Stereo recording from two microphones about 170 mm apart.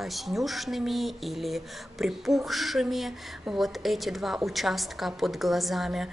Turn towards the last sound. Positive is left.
turn(degrees=0)  # may be behind; listen again after turning